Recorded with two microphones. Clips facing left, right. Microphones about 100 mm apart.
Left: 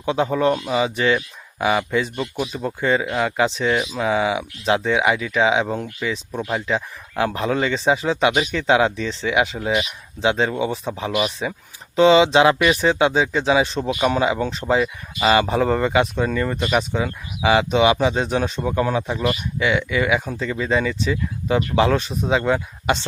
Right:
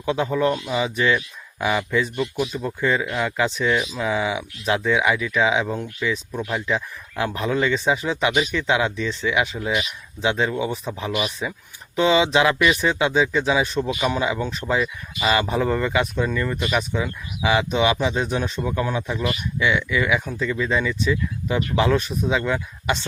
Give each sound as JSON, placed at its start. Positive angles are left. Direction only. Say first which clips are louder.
{"t": 0.0, "sound": "speech", "louder": "left 2 dB", "side_deg": 25}
{"t": 13.9, "sound": "speech", "louder": "left 7 dB", "side_deg": 40}
{"t": 14.2, "sound": "speech", "louder": "left 3 dB", "side_deg": 30}